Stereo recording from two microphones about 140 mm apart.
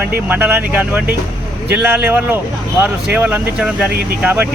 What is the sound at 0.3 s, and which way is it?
Speech, 10° right (ahead or behind).